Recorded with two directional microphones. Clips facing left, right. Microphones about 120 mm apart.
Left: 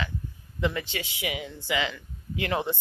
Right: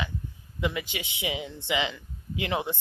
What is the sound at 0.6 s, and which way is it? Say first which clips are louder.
A woman's voice: left 2 dB; 15° right (ahead or behind).